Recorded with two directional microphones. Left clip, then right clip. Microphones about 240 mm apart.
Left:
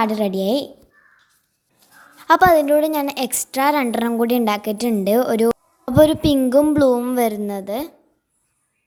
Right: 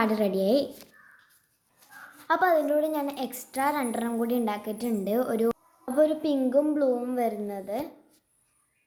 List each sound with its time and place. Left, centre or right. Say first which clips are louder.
0.0 s a woman's voice: left 5 dB; left
1.8 s dog: right 1 dB; centre
2.2 s a woman's voice: left 10 dB; left